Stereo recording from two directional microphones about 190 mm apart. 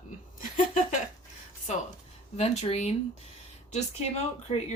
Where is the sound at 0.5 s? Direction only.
45° left (ahead or behind).